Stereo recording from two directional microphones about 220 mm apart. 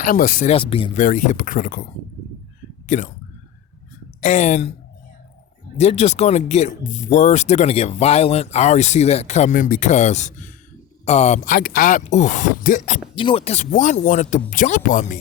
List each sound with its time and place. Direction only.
0.0 s speech: 40° left (ahead or behind)
0.5 s speech: 25° left (ahead or behind)
2.8 s speech: 35° left (ahead or behind)
4.2 s speech: 30° left (ahead or behind)
5.7 s speech: 30° left (ahead or behind)
13.1 s speech: 25° left (ahead or behind)